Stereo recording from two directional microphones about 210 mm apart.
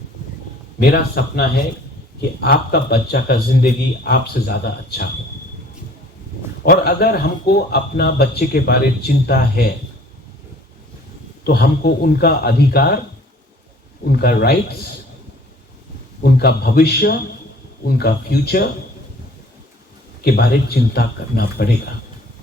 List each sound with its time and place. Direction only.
0.8 s speech: 45° left (ahead or behind)
6.7 s speech: 45° left (ahead or behind)
11.4 s speech: 45° left (ahead or behind)
14.1 s speech: 50° left (ahead or behind)
16.2 s speech: 50° left (ahead or behind)
20.2 s speech: 50° left (ahead or behind)